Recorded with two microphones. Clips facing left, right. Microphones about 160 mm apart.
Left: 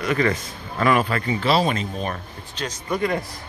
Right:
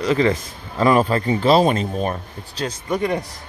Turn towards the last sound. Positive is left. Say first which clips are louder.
# right 2 dB
turn(degrees=-20)  # may be behind; listen again after turning